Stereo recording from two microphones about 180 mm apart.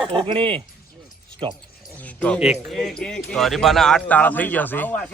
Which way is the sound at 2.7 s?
5° left (ahead or behind).